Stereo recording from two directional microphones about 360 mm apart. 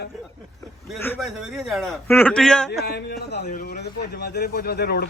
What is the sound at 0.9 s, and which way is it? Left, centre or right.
A man's voice, centre.